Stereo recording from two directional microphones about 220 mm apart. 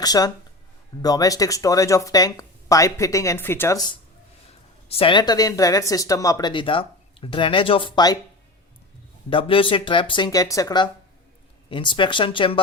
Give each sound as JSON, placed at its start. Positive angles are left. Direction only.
{"t": 0.0, "sound": "speech", "side_deg": 15}
{"t": 4.9, "sound": "speech", "side_deg": 25}
{"t": 9.3, "sound": "speech", "side_deg": 25}